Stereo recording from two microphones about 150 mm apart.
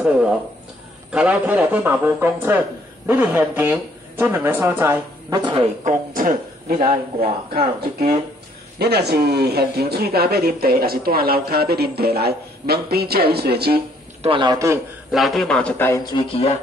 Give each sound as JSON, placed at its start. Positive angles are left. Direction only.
{"t": 1.1, "sound": "speech", "side_deg": -10}
{"t": 5.9, "sound": "a man's voice", "side_deg": -65}
{"t": 7.2, "sound": "speech", "side_deg": -90}
{"t": 14.2, "sound": "a man's voice", "side_deg": -35}
{"t": 15.0, "sound": "a man's voice", "side_deg": 0}
{"t": 15.9, "sound": "a man's voice", "side_deg": 25}